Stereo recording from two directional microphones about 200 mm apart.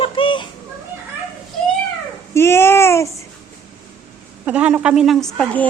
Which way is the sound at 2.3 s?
10° left (ahead or behind).